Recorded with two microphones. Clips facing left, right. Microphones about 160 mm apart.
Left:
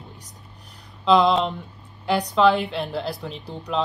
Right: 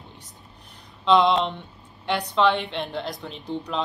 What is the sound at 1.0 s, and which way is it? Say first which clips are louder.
Speech: left 1 dB; centre (ahead or behind).